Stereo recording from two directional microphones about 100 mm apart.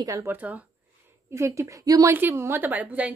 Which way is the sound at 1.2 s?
30° right (ahead or behind).